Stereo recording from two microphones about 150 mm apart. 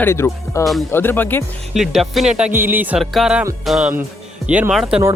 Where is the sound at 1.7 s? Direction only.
Centre (ahead or behind).